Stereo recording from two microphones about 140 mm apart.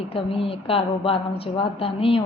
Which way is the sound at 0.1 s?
40° left (ahead or behind).